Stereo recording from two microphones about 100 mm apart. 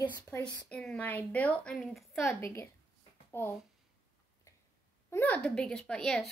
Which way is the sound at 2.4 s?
30° left (ahead or behind).